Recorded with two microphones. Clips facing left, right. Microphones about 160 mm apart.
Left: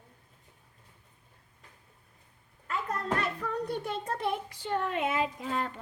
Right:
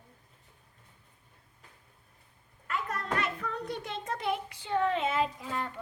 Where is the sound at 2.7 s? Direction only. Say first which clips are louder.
Left 2 dB; 35° left (ahead or behind).